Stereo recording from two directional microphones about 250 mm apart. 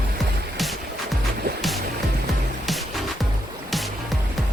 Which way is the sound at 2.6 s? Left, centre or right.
Centre.